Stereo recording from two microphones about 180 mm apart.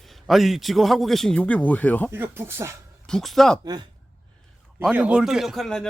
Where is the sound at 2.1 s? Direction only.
15° right (ahead or behind).